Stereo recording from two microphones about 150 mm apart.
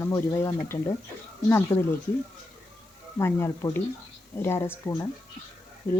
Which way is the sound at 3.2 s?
15° left (ahead or behind).